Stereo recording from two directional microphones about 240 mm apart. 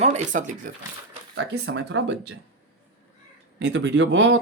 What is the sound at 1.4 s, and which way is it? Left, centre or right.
Speech, right.